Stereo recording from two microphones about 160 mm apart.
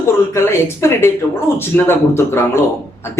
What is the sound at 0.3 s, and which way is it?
A woman's voice, 15° left (ahead or behind).